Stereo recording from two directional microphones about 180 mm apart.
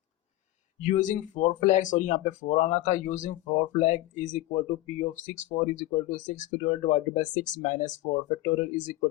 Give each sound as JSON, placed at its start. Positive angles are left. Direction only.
{"t": 0.8, "sound": "speech", "side_deg": 45}